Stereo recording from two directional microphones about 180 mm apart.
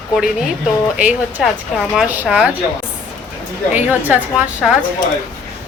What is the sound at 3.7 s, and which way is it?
A woman's voice, 10° right (ahead or behind).